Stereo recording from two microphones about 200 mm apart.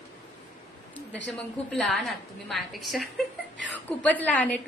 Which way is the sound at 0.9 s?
65° left (ahead or behind).